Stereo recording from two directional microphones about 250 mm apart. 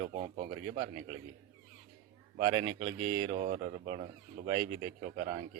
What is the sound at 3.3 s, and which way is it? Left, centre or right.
Speech, right.